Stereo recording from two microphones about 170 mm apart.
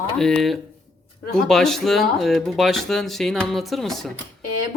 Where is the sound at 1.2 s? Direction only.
60° left (ahead or behind).